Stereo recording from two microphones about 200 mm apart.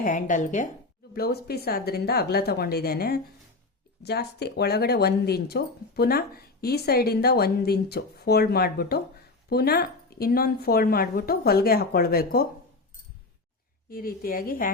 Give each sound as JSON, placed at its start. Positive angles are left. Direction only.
{"t": 0.0, "sound": "speech", "side_deg": 40}
{"t": 1.1, "sound": "speech", "side_deg": 50}
{"t": 13.9, "sound": "speech", "side_deg": 45}